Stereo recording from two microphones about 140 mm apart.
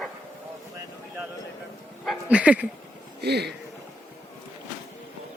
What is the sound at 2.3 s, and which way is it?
Speech, 10° right (ahead or behind).